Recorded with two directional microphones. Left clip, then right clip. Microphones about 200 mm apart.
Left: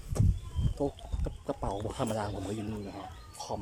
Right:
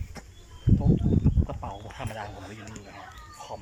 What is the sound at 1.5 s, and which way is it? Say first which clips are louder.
Speech: left 3 dB; 25° left (ahead or behind).